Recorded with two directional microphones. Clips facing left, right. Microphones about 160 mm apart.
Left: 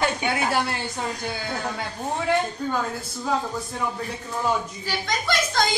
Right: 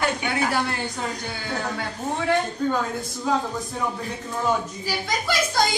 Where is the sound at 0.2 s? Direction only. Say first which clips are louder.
Even; 25° left (ahead or behind).